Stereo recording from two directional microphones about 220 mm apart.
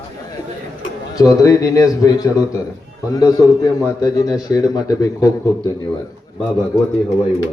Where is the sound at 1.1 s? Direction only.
15° left (ahead or behind).